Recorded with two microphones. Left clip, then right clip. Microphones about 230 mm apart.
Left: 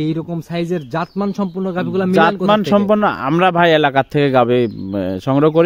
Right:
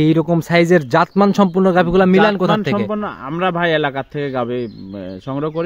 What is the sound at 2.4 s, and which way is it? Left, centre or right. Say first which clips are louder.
A man's voice: left 3 dB; left.